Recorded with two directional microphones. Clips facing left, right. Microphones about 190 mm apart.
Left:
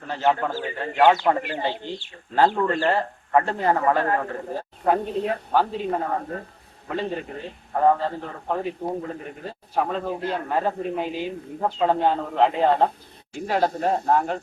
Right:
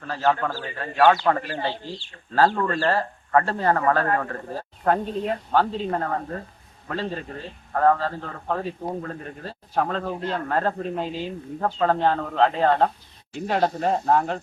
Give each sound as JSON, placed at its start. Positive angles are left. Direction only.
{"t": 0.1, "sound": "a man's voice", "side_deg": 20}